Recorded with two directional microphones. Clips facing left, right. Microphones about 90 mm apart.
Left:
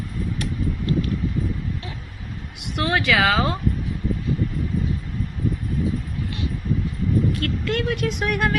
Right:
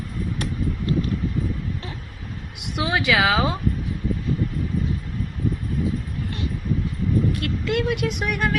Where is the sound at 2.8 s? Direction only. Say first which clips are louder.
Left 1 dB; 10° right (ahead or behind).